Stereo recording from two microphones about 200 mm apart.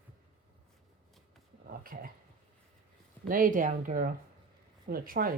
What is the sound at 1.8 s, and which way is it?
Speech, 45° right (ahead or behind).